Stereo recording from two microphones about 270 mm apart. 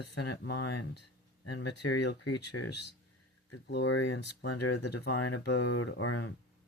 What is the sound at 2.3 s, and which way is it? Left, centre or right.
Speech, left.